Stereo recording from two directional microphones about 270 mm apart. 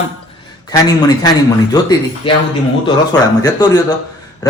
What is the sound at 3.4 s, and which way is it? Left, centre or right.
Speech, centre.